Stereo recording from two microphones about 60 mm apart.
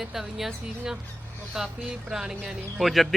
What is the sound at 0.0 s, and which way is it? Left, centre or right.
Speech, centre.